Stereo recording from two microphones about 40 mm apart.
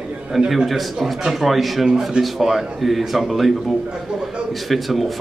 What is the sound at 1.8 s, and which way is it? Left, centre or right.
Speech, centre.